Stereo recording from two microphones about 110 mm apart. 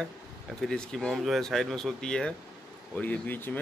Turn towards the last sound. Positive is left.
turn(degrees=15)  # may be behind; listen again after turning